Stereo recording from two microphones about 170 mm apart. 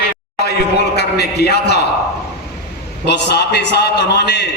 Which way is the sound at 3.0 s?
80° left.